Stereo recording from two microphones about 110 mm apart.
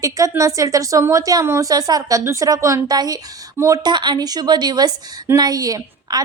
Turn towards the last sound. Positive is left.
turn(degrees=-35)  # may be behind; listen again after turning